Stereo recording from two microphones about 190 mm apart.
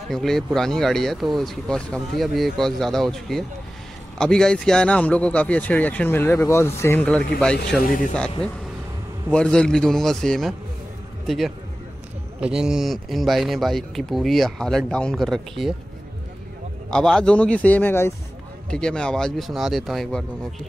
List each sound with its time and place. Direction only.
0.1 s speech: centre (ahead or behind)
7.8 s speech: 45° left (ahead or behind)
8.4 s speech: 5° left (ahead or behind)
16.9 s speech: 5° left (ahead or behind)